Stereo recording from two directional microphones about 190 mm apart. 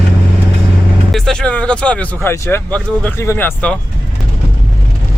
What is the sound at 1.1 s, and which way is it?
Speech, 5° left (ahead or behind).